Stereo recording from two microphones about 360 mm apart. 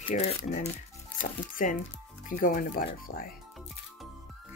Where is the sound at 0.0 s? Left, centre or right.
Centre.